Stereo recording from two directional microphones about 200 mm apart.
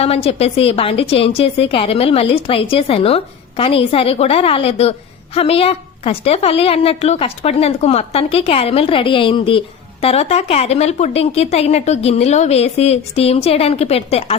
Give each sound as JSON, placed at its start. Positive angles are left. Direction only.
{"t": 0.0, "sound": "a woman's voice", "side_deg": 30}